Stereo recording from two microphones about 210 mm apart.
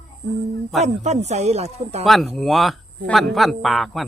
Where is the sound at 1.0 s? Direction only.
30° right (ahead or behind).